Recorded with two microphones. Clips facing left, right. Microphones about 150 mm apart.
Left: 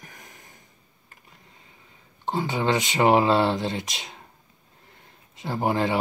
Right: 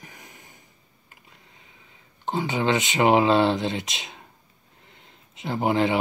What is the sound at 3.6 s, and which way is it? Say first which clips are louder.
Speech: right 1 dB; 20° right (ahead or behind).